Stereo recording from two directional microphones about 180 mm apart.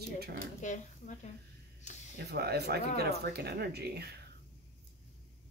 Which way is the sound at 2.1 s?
65° right (ahead or behind).